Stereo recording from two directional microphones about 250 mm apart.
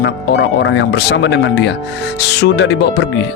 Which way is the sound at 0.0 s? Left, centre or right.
Left.